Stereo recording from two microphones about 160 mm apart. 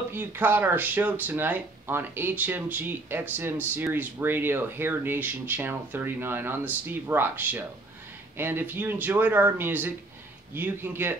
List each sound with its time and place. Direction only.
0.1 s speech: 15° right (ahead or behind)